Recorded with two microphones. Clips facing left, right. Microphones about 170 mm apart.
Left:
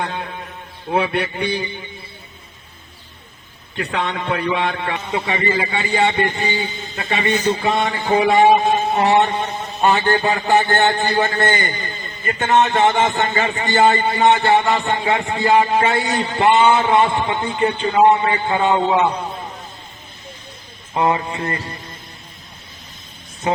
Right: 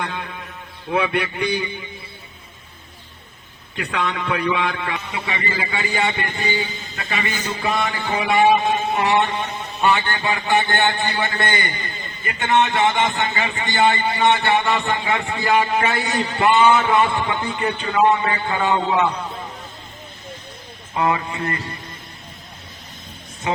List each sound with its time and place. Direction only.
0.0 s a man's voice: 35° left (ahead or behind)
3.8 s a man's voice: 30° left (ahead or behind)
20.9 s music: 25° left (ahead or behind)